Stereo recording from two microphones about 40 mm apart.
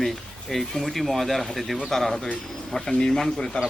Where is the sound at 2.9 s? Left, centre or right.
Centre.